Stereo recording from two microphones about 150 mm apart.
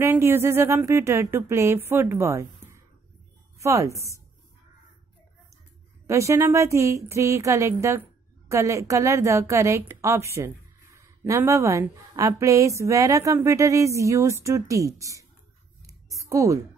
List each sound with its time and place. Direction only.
0.0 s speech: 15° right (ahead or behind)
3.5 s speech: 20° right (ahead or behind)
6.0 s speech: 20° right (ahead or behind)
15.8 s a sound: 20° right (ahead or behind)